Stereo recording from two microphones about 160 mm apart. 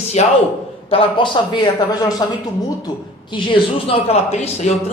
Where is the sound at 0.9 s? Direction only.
35° left (ahead or behind).